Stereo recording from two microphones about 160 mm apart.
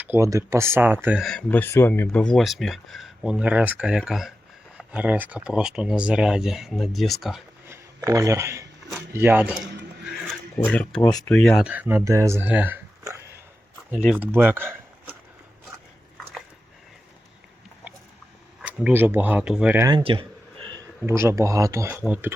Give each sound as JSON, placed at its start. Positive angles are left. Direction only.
{"t": 0.0, "sound": "speech", "side_deg": -15}
{"t": 1.2, "sound": "speech", "side_deg": 5}
{"t": 7.7, "sound": "speech", "side_deg": -20}
{"t": 10.6, "sound": "speech", "side_deg": 5}
{"t": 11.6, "sound": "speech", "side_deg": -10}
{"t": 13.9, "sound": "speech", "side_deg": -5}
{"t": 18.6, "sound": "speech", "side_deg": -10}
{"t": 19.8, "sound": "a sound", "side_deg": -30}
{"t": 21.0, "sound": "speech", "side_deg": -15}